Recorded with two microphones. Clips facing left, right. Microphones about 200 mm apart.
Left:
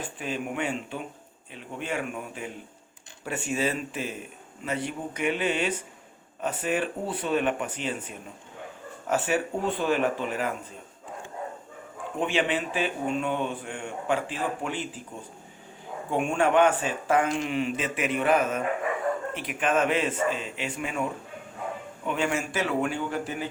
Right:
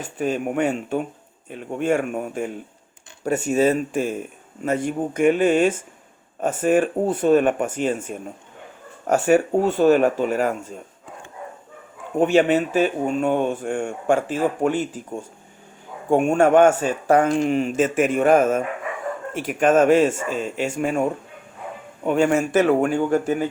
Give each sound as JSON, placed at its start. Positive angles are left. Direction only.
{"t": 0.0, "sound": "speech", "side_deg": -45}
{"t": 12.1, "sound": "speech", "side_deg": -45}